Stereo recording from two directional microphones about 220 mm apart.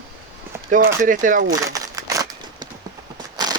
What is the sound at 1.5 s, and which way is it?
Crumpling, 15° right (ahead or behind).